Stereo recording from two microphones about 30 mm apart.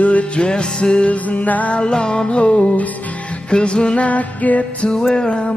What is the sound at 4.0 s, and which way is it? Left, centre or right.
Music, left.